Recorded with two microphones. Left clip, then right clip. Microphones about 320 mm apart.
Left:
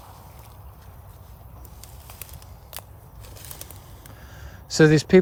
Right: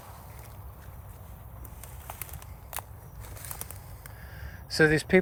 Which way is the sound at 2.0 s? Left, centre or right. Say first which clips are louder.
Right 3 dB; centre.